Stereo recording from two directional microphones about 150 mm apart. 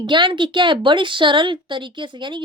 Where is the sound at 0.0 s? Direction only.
30° right (ahead or behind).